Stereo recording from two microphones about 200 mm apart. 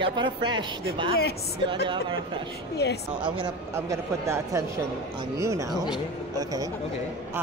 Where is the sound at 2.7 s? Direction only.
55° left (ahead or behind).